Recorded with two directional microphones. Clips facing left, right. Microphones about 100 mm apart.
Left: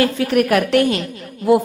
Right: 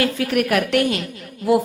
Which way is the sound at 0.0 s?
30° left (ahead or behind).